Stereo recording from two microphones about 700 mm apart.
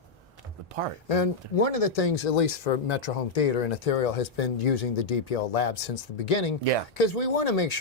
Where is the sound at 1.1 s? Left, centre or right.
Left.